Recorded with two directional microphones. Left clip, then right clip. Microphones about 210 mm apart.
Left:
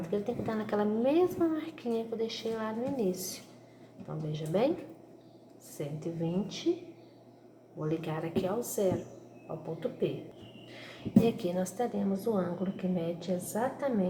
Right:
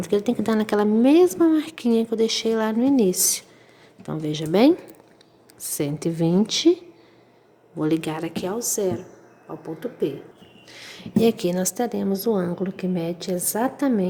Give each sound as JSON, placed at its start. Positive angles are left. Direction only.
{"t": 0.0, "sound": "a woman's voice", "side_deg": -50}
{"t": 7.8, "sound": "a woman's voice", "side_deg": -50}
{"t": 10.7, "sound": "a woman's voice", "side_deg": -45}